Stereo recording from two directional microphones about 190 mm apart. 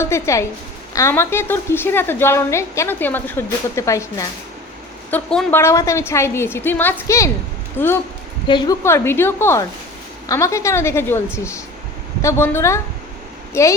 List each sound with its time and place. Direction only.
0.0 s a woman's voice: 15° left (ahead or behind)
8.4 s a woman's voice: 20° left (ahead or behind)
12.2 s a woman's voice: 15° left (ahead or behind)